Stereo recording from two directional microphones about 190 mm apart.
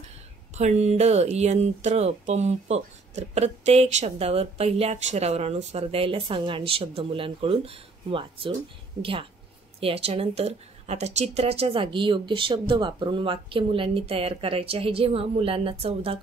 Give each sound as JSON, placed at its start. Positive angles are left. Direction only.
{"t": 0.6, "sound": "speech", "side_deg": -35}
{"t": 9.8, "sound": "speech", "side_deg": -30}